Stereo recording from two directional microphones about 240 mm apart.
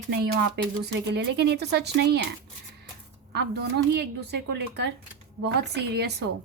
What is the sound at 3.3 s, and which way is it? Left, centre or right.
Speech, right.